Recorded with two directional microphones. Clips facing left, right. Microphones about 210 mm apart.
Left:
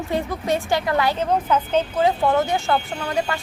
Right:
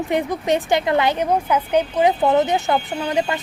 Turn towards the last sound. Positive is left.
turn(degrees=-20)  # may be behind; listen again after turning